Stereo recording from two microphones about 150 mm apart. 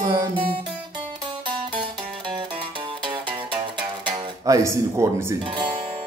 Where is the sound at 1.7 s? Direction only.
35° right (ahead or behind).